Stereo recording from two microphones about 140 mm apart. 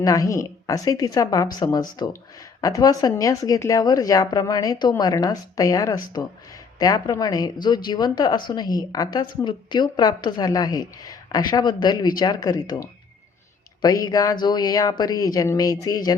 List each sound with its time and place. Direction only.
0.0 s speech: 25° left (ahead or behind)